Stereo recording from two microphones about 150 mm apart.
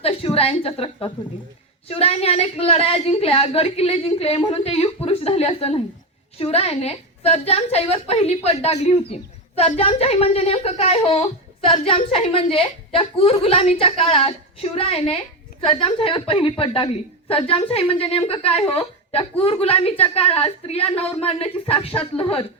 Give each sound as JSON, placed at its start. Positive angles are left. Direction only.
{"t": 0.0, "sound": "a woman's voice", "side_deg": 40}